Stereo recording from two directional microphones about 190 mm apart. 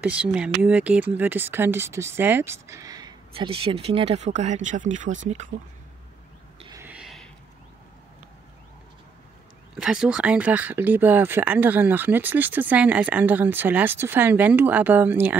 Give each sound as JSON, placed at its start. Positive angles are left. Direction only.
{"t": 0.0, "sound": "speech", "side_deg": -5}
{"t": 5.5, "sound": "speech", "side_deg": -80}
{"t": 6.7, "sound": "a sound", "side_deg": -10}
{"t": 9.8, "sound": "speech", "side_deg": -5}